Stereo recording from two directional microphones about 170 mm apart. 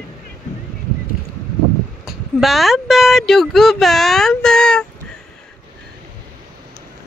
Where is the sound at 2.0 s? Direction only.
Centre (ahead or behind).